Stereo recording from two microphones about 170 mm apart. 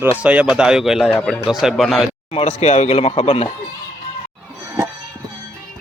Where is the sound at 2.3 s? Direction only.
40° left (ahead or behind).